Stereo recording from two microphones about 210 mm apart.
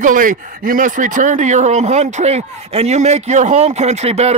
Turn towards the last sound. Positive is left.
turn(degrees=-30)  # may be behind; listen again after turning